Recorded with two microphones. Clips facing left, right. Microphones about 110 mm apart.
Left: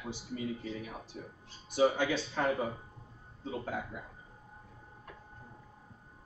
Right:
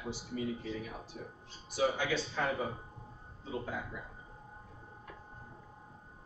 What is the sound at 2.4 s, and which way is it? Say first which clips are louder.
Speech: left 4 dB; 45° left (ahead or behind).